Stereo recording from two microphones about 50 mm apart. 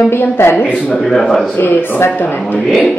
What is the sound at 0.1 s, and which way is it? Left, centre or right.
Speech, left.